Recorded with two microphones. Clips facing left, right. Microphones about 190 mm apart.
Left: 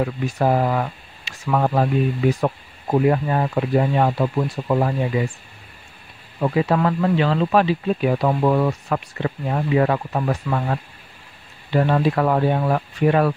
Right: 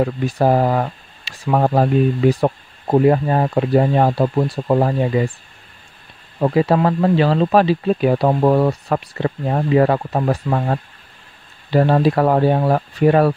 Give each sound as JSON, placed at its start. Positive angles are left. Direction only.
{"t": 0.0, "sound": "speech", "side_deg": -35}
{"t": 6.4, "sound": "speech", "side_deg": -35}